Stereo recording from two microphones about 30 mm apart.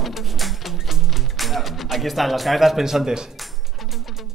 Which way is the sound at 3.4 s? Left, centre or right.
Centre.